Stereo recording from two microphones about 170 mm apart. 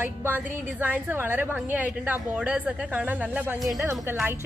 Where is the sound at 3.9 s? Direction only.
20° right (ahead or behind).